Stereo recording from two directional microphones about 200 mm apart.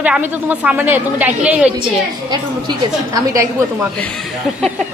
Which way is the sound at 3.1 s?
15° right (ahead or behind).